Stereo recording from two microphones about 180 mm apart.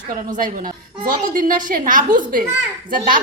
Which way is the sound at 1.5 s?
50° right (ahead or behind).